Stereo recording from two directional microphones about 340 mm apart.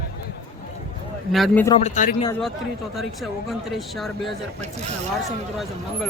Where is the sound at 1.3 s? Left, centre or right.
Centre.